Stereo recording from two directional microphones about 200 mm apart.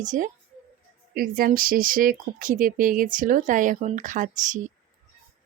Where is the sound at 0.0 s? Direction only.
40° right (ahead or behind).